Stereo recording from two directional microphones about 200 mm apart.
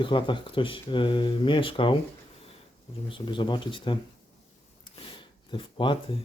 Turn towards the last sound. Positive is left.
turn(degrees=25)  # may be behind; listen again after turning